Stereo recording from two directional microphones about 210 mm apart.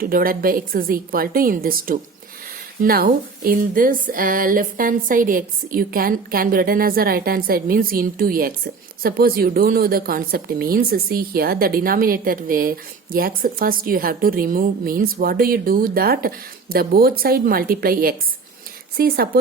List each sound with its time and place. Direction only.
0.0 s speech: 45° right (ahead or behind)